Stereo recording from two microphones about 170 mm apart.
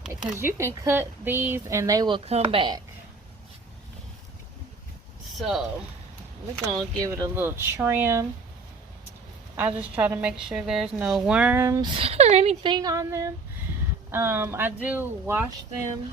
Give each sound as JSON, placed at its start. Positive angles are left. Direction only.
{"t": 0.1, "sound": "speech", "side_deg": -15}
{"t": 5.4, "sound": "speech", "side_deg": 0}
{"t": 6.7, "sound": "speech", "side_deg": -25}
{"t": 9.6, "sound": "speech", "side_deg": -10}
{"t": 12.7, "sound": "speech", "side_deg": -20}